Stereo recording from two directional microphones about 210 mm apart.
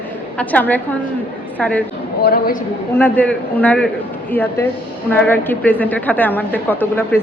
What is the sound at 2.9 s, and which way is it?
A woman's voice, 10° left (ahead or behind).